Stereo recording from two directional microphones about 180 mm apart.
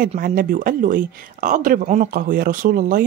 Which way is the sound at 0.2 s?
50° right (ahead or behind).